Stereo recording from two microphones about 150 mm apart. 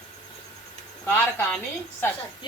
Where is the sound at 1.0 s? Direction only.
15° left (ahead or behind).